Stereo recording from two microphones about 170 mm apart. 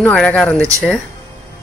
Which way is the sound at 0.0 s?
5° left (ahead or behind).